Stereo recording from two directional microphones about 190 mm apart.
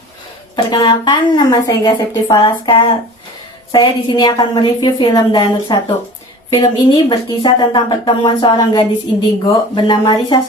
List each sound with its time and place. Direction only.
0.5 s speech: 20° left (ahead or behind)